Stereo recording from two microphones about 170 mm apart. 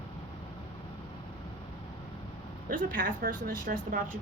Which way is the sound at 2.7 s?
50° right (ahead or behind).